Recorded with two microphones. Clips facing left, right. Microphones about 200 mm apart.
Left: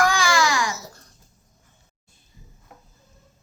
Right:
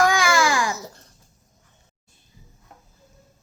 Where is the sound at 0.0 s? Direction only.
20° right (ahead or behind).